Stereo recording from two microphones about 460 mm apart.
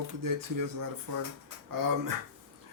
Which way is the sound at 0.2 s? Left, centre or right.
Right.